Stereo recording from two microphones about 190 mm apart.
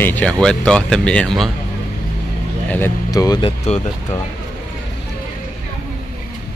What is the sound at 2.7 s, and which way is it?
Speech, 15° left (ahead or behind).